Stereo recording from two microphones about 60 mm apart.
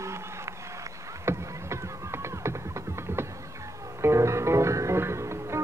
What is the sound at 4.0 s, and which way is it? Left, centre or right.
Music, right.